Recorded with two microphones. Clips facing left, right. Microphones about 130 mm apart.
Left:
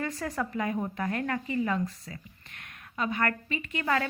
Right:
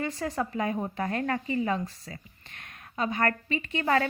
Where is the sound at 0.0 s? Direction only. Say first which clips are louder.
Right 2 dB; 20° right (ahead or behind).